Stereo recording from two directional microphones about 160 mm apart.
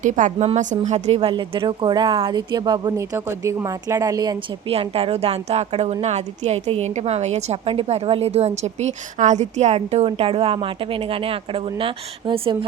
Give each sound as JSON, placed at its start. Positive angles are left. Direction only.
{"t": 0.0, "sound": "speech", "side_deg": -50}
{"t": 4.7, "sound": "a woman's voice", "side_deg": -35}